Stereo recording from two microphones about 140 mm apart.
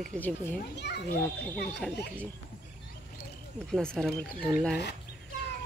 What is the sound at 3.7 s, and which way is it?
Speech, centre (ahead or behind).